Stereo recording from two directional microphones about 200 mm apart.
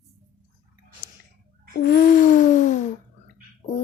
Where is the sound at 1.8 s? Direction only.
45° left (ahead or behind).